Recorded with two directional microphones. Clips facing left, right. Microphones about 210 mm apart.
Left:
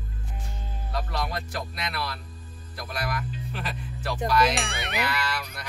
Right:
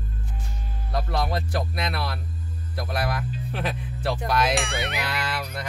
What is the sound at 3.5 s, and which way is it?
Speech, 55° right (ahead or behind).